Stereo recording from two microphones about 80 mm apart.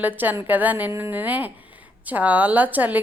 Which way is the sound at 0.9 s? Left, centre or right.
Right.